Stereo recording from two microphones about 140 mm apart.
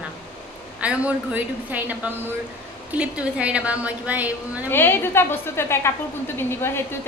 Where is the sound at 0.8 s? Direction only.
10° right (ahead or behind).